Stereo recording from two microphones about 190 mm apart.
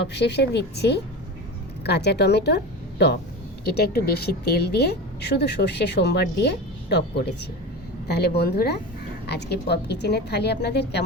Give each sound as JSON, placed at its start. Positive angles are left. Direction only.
{"t": 0.0, "sound": "a woman's voice", "side_deg": 60}
{"t": 3.6, "sound": "a woman's voice", "side_deg": 55}